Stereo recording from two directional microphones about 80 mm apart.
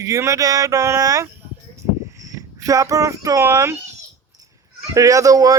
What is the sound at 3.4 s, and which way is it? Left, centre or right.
Speech, right.